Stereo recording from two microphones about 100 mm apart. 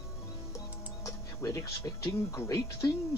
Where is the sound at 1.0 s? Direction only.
30° left (ahead or behind).